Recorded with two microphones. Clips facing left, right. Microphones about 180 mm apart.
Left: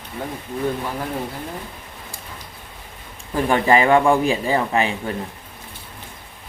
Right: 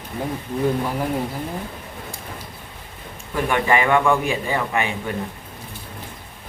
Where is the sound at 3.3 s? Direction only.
35° left (ahead or behind).